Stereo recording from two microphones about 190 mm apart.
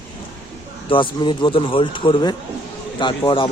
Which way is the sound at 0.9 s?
25° left (ahead or behind).